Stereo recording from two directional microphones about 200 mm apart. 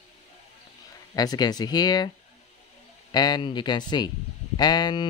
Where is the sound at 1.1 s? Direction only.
20° left (ahead or behind).